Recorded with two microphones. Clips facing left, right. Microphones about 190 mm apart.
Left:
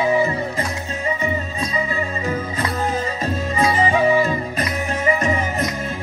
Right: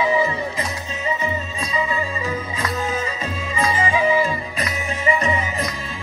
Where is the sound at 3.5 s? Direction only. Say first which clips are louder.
Left 3 dB; 40° left (ahead or behind).